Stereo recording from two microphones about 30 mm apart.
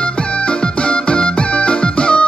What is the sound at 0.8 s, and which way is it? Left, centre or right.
Music, left.